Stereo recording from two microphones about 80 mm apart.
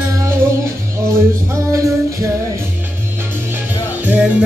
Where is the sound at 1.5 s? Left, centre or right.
Right.